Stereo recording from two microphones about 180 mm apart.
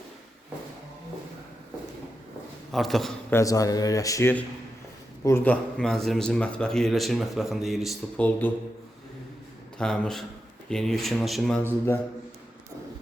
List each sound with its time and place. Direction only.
2.7 s speech: centre (ahead or behind)
3.3 s speech: 20° left (ahead or behind)
9.7 s speech: 5° left (ahead or behind)